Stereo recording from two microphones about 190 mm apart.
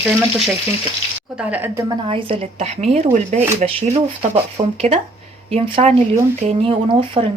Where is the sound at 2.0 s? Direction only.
25° right (ahead or behind).